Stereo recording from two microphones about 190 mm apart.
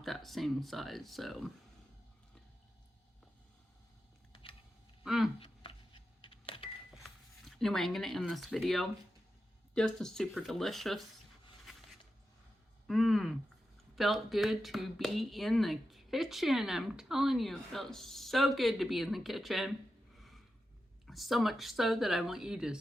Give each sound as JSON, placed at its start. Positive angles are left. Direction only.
{"t": 0.0, "sound": "speech", "side_deg": 0}
{"t": 5.0, "sound": "speech", "side_deg": 0}
{"t": 5.4, "sound": "a sound", "side_deg": 25}
{"t": 6.9, "sound": "speech", "side_deg": 0}
{"t": 12.9, "sound": "speech", "side_deg": 0}
{"t": 20.1, "sound": "a sound", "side_deg": 0}
{"t": 21.1, "sound": "speech", "side_deg": 0}